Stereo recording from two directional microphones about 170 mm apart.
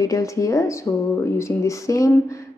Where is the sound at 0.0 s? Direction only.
20° left (ahead or behind).